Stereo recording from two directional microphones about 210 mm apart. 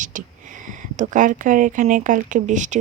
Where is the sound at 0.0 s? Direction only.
35° right (ahead or behind).